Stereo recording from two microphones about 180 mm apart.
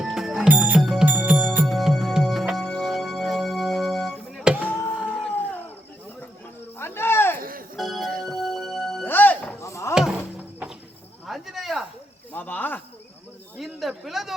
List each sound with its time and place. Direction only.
0.0 s music: 5° right (ahead or behind)
6.7 s snake: 15° left (ahead or behind)
7.3 s music: 50° right (ahead or behind)
7.8 s music: centre (ahead or behind)
9.0 s a sound: 10° left (ahead or behind)
9.9 s a sound: centre (ahead or behind)
11.3 s snake: centre (ahead or behind)
12.3 s cricket: 10° left (ahead or behind)
13.6 s a sound: centre (ahead or behind)